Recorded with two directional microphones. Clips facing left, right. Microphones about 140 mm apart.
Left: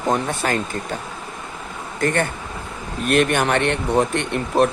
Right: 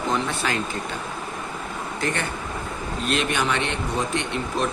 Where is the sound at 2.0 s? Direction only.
50° left (ahead or behind).